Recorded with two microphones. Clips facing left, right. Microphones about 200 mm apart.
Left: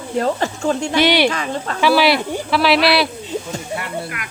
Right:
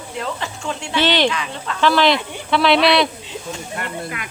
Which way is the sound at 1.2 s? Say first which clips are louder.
Left 2 dB; 45° left (ahead or behind).